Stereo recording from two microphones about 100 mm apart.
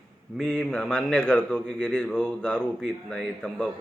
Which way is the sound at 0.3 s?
5° left (ahead or behind).